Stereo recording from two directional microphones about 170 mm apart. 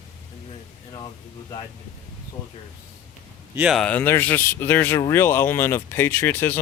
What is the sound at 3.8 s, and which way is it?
Speech, 10° left (ahead or behind).